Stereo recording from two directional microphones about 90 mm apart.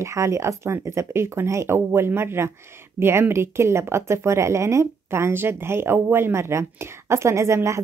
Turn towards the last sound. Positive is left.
turn(degrees=-30)  # may be behind; listen again after turning